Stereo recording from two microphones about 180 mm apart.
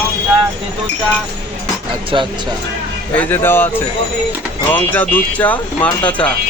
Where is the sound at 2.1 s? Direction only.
30° right (ahead or behind).